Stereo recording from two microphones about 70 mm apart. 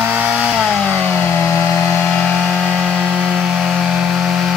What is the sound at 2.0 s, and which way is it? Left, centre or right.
Vehicle, centre.